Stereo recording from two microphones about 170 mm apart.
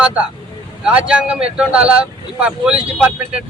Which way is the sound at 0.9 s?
5° right (ahead or behind).